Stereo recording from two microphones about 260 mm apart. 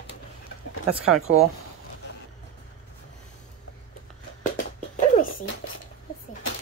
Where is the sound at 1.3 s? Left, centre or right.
Right.